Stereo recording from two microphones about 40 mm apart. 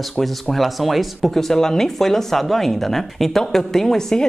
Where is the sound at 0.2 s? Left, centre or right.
Centre.